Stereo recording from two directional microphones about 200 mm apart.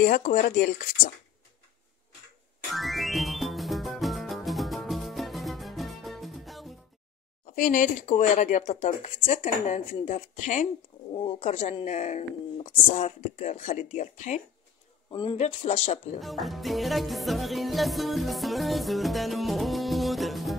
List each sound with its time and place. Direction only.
0.0 s speech: 45° left (ahead or behind)
2.7 s music: centre (ahead or behind)
7.4 s speech: 40° left (ahead or behind)
11.1 s speech: 25° left (ahead or behind)
15.0 s speech: 25° left (ahead or behind)
16.2 s music: centre (ahead or behind)